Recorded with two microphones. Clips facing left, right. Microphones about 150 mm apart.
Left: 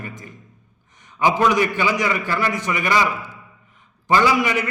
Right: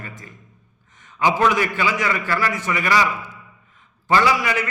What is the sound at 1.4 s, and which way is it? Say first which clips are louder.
A man's voice: left 1 dB; 15° left (ahead or behind).